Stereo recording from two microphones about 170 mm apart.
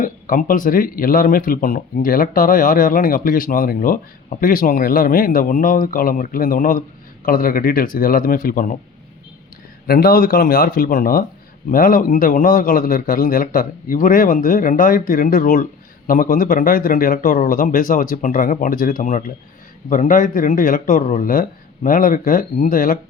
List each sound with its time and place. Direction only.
0.0 s speech: 55° left (ahead or behind)
9.8 s a man's voice: 60° left (ahead or behind)